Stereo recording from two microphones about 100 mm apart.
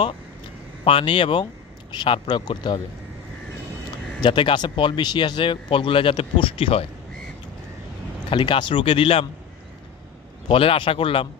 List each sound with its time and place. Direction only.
0.8 s speech: 65° left (ahead or behind)
2.2 s speech: 45° left (ahead or behind)
4.2 s speech: 55° left (ahead or behind)
8.3 s speech: 55° left (ahead or behind)
10.5 s speech: 70° left (ahead or behind)